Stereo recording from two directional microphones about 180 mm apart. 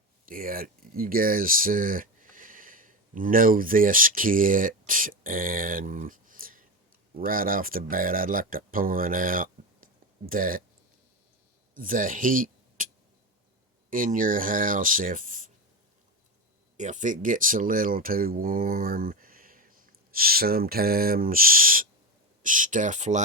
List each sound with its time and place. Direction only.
0.3 s speech: 50° right (ahead or behind)
11.7 s speech: 50° right (ahead or behind)
13.9 s speech: 50° right (ahead or behind)
16.7 s speech: 45° right (ahead or behind)